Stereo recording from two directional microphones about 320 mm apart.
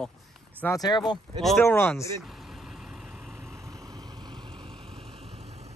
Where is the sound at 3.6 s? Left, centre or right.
Centre.